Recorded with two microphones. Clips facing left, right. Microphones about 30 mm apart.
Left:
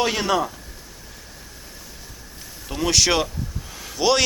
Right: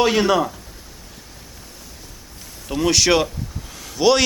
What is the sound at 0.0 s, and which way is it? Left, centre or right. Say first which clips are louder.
Speech: right 4 dB; centre.